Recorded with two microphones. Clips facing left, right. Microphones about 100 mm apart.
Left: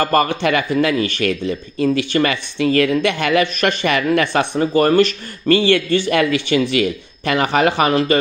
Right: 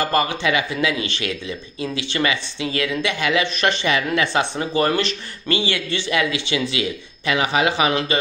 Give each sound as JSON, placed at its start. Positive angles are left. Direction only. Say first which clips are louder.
{"t": 0.0, "sound": "speech", "louder": "left 4 dB", "side_deg": 50}